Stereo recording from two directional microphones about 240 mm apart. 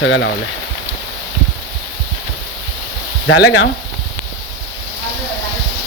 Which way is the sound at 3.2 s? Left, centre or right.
Left.